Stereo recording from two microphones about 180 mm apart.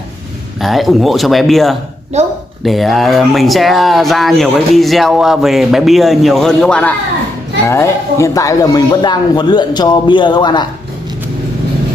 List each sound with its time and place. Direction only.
0.6 s speech: centre (ahead or behind); by 10.7 s 25° left (ahead or behind)